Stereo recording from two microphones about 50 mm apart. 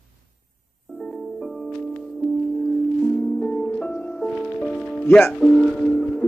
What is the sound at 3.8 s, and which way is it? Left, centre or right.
Music, left.